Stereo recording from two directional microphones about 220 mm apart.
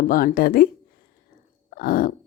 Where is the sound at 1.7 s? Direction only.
40° left (ahead or behind).